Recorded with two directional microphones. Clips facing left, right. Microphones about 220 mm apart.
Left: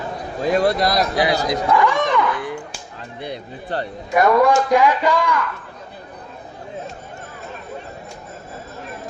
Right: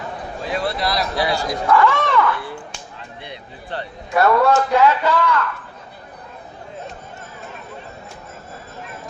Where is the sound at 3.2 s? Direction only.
40° left (ahead or behind).